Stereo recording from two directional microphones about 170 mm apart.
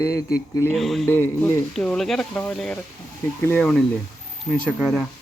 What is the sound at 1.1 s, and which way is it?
Speech, 15° left (ahead or behind).